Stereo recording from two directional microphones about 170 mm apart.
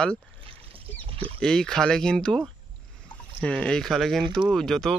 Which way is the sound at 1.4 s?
5° left (ahead or behind).